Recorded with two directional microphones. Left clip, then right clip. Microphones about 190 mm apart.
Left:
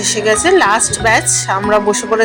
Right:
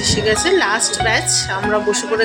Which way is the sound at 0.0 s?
15° left (ahead or behind).